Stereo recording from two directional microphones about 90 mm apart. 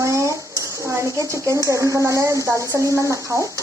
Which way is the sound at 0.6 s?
35° right (ahead or behind).